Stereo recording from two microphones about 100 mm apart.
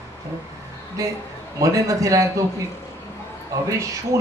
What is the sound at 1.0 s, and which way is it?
Speech, 35° right (ahead or behind).